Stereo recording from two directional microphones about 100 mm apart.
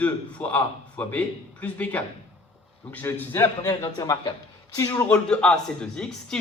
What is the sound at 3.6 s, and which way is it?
A man's voice, 35° left (ahead or behind).